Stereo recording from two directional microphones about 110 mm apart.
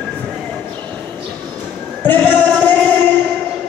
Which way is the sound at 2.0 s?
15° left (ahead or behind).